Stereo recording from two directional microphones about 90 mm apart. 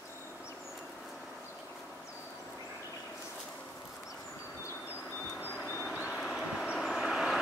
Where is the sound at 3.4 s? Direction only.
10° left (ahead or behind).